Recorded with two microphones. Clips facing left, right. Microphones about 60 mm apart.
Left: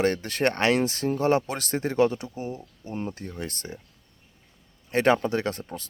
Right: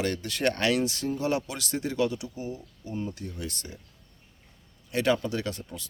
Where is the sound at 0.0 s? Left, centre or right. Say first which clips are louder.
Left 4 dB; left.